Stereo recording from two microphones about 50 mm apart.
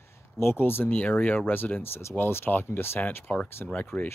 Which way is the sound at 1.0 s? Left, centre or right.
Left.